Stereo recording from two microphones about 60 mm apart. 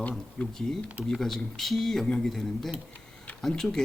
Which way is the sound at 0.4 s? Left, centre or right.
Left.